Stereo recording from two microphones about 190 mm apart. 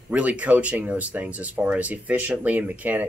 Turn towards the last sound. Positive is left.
turn(degrees=-10)  # may be behind; listen again after turning